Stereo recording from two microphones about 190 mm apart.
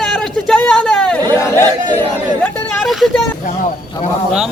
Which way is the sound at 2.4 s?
Centre (ahead or behind).